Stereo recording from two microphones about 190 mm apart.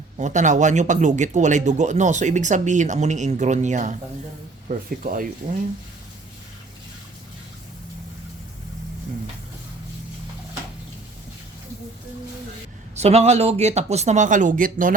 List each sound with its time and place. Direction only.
0.2 s speech: 40° right (ahead or behind)
13.0 s speech: 35° right (ahead or behind)